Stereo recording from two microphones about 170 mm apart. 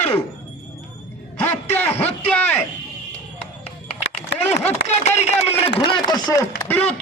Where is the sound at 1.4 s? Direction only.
10° left (ahead or behind).